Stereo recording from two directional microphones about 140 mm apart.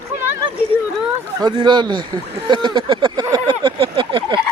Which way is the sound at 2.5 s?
35° right (ahead or behind).